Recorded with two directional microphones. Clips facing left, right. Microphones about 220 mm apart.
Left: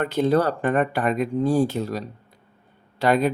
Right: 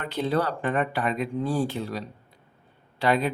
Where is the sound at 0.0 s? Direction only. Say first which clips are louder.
Left 6 dB; 45° left (ahead or behind).